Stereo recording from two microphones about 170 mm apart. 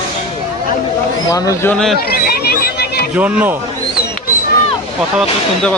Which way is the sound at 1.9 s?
65° left (ahead or behind).